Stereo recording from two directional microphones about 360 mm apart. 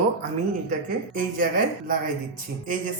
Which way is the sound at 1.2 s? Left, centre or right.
Right.